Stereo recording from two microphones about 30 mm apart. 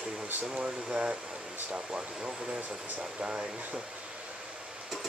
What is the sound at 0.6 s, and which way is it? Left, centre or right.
Speech, right.